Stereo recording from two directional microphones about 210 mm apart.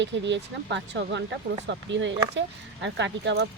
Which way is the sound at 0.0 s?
55° right (ahead or behind).